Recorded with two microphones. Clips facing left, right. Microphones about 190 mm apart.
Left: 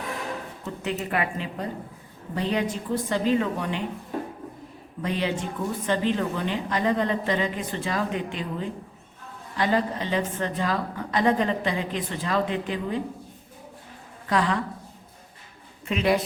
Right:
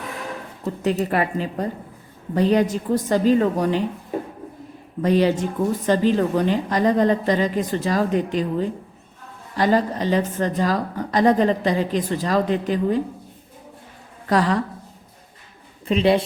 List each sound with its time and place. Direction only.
0.6 s a woman's voice: 40° right (ahead or behind)
5.0 s a woman's voice: 40° right (ahead or behind)
14.3 s a woman's voice: 40° right (ahead or behind)
15.9 s speech: 30° right (ahead or behind)